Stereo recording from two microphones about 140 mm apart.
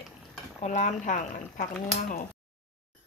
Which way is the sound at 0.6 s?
60° left (ahead or behind).